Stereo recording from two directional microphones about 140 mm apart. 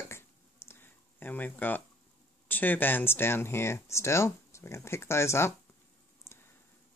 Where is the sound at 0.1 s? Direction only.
15° left (ahead or behind).